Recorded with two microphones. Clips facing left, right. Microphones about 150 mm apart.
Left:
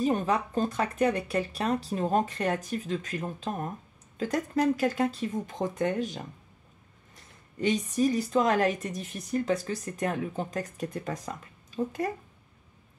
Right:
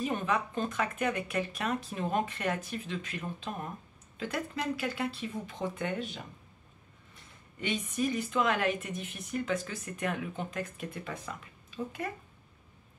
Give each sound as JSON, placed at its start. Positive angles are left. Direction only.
{"t": 0.0, "sound": "speech", "side_deg": 35}
{"t": 7.5, "sound": "speech", "side_deg": 40}